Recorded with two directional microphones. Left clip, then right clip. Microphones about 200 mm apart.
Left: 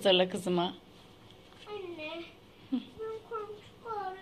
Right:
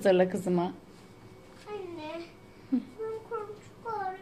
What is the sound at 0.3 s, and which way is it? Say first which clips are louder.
Speech: right 1 dB; centre (ahead or behind).